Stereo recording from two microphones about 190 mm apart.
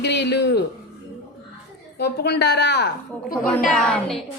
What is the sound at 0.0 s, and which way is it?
Speech, 60° left (ahead or behind).